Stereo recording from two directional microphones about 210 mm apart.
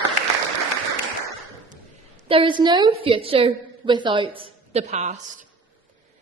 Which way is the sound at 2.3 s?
25° right (ahead or behind).